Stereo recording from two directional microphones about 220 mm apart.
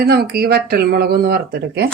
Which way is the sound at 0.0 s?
45° right (ahead or behind).